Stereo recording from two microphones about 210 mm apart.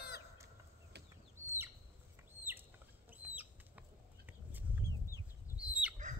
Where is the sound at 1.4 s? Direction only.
10° right (ahead or behind).